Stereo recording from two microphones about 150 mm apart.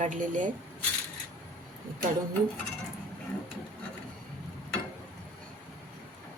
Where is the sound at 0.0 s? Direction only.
60° right (ahead or behind).